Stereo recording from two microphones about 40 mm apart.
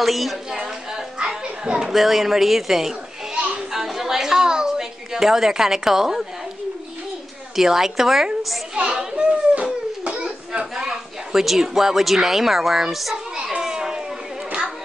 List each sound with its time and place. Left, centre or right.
0.0 s a woman's voice: centre
0.7 s a sound: centre
1.4 s speech: centre
3.7 s a sound: centre
7.5 s a child's voice: centre
8.7 s children playing: right
10.0 s a sound: right
11.4 s a child's voice: centre
13.6 s children playing: centre